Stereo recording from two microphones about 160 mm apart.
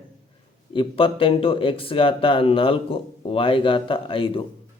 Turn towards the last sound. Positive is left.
turn(degrees=35)  # may be behind; listen again after turning